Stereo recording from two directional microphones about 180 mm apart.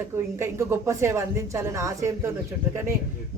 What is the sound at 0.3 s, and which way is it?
Speech, 15° right (ahead or behind).